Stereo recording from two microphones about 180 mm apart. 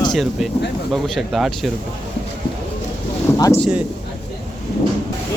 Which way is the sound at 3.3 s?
15° left (ahead or behind).